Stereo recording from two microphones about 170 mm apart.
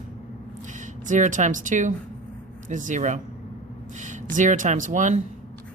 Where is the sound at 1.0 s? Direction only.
45° right (ahead or behind).